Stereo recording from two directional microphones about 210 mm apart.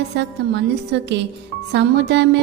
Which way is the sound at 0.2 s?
55° right (ahead or behind).